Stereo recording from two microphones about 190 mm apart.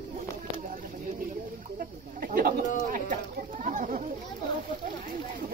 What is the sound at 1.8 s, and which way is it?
Bird, 50° right (ahead or behind).